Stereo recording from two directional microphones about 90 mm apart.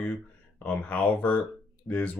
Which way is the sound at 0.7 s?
15° left (ahead or behind).